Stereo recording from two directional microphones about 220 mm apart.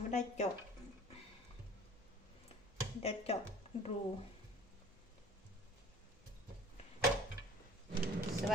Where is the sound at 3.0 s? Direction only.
25° left (ahead or behind).